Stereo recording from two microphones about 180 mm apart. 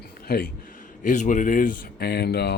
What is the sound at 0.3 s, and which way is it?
Speech, 55° left (ahead or behind).